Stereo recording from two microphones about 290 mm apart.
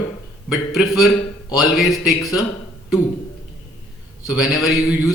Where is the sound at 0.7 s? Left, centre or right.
Centre.